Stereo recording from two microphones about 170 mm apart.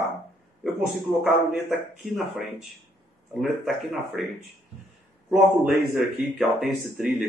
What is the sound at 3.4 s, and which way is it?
Speech, centre (ahead or behind).